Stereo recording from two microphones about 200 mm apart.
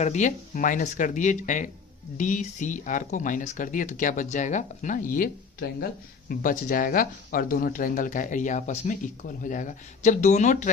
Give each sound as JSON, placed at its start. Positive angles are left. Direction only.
{"t": 0.0, "sound": "speech", "side_deg": 35}